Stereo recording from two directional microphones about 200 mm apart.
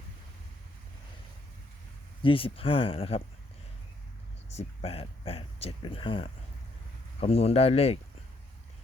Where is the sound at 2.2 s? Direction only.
25° left (ahead or behind).